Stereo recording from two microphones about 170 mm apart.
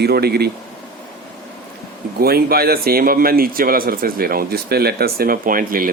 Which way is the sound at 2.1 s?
65° right (ahead or behind).